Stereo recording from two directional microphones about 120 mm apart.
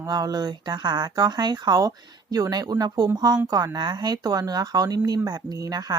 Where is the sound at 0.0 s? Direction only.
30° right (ahead or behind).